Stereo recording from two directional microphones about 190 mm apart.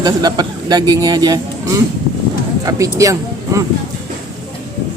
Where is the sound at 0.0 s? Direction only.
20° right (ahead or behind).